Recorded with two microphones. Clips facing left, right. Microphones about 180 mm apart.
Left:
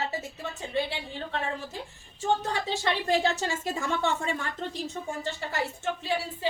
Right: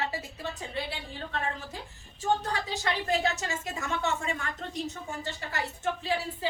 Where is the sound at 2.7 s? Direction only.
25° left (ahead or behind).